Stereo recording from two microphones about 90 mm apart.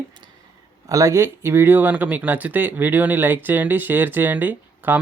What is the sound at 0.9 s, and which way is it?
Speech, 40° right (ahead or behind).